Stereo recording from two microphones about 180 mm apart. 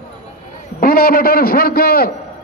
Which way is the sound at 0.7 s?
55° left (ahead or behind).